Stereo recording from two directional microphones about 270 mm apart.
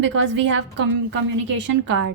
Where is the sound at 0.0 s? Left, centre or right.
Right.